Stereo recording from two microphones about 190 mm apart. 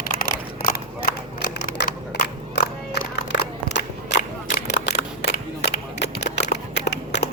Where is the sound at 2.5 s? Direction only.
65° left (ahead or behind).